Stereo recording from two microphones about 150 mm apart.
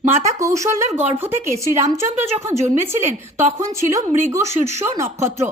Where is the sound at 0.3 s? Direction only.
20° right (ahead or behind).